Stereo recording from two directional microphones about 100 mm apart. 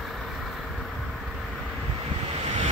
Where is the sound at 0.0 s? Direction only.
Centre (ahead or behind).